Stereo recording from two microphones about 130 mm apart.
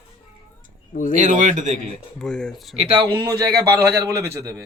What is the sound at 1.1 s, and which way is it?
Speech, 70° right (ahead or behind).